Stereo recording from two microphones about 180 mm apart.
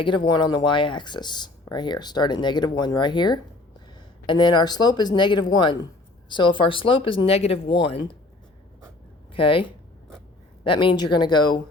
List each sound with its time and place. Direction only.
0.0 s speech: 25° left (ahead or behind)
9.3 s a woman's voice: 30° left (ahead or behind)